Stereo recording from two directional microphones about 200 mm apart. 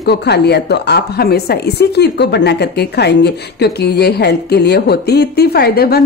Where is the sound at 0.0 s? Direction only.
55° left (ahead or behind).